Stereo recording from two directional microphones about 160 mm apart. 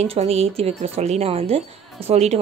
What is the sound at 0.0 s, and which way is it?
A woman's voice, 40° right (ahead or behind).